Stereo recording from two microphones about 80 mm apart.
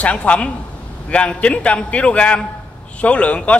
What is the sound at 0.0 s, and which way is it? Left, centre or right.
A man's voice, centre.